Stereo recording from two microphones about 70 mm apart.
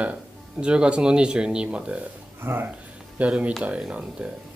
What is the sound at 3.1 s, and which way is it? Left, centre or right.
Speech, centre.